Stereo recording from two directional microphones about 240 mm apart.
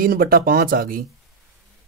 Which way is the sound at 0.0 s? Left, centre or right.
Right.